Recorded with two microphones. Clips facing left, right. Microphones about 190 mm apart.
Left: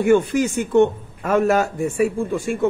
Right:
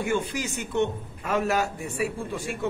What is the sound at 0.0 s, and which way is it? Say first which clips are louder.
A man's voice: left 11 dB; 60° left (ahead or behind).